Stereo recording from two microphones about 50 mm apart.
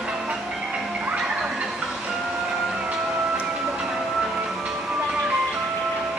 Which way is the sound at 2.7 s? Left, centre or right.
Centre.